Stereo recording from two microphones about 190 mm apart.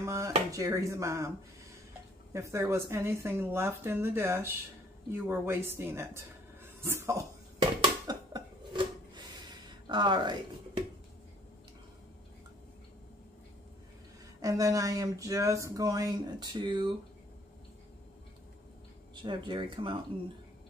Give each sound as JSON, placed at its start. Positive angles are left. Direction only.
{"t": 0.0, "sound": "speech", "side_deg": -15}
{"t": 2.3, "sound": "speech", "side_deg": -15}
{"t": 5.1, "sound": "a sound", "side_deg": -10}
{"t": 9.8, "sound": "speech", "side_deg": -25}
{"t": 14.4, "sound": "speech", "side_deg": -15}
{"t": 19.2, "sound": "speech", "side_deg": -25}